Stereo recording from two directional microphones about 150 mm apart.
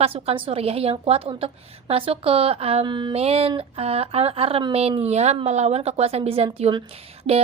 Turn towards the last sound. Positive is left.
turn(degrees=-40)  # may be behind; listen again after turning